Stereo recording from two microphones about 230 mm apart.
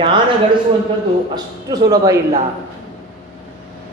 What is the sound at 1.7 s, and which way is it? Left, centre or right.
Speech, centre.